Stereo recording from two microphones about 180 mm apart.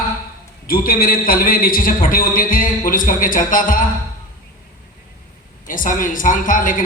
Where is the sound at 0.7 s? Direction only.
55° left (ahead or behind).